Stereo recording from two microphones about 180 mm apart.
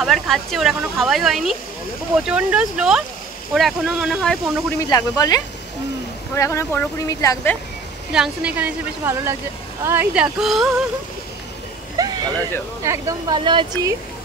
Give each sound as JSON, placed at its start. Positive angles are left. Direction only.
{"t": 0.0, "sound": "speech", "side_deg": 0}
{"t": 4.7, "sound": "speech", "side_deg": 20}
{"t": 8.1, "sound": "speech", "side_deg": -5}
{"t": 12.0, "sound": "a sound", "side_deg": -20}
{"t": 12.8, "sound": "speech", "side_deg": -15}